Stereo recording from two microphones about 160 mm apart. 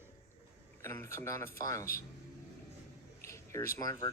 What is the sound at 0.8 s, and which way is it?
A man's voice, 15° left (ahead or behind).